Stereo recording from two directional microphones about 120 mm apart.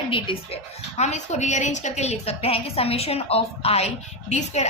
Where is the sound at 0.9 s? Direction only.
70° left (ahead or behind).